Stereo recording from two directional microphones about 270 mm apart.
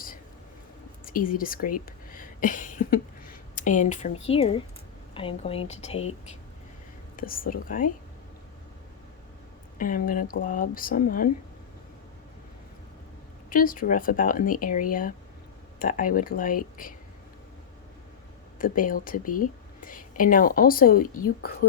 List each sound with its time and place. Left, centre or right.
1.0 s speech: left
2.0 s a sound: left
3.5 s speech: left
7.2 s speech: left
9.7 s speech: left
13.5 s speech: left
18.6 s speech: left